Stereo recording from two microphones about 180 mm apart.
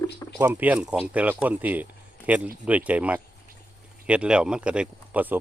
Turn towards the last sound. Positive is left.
turn(degrees=-10)  # may be behind; listen again after turning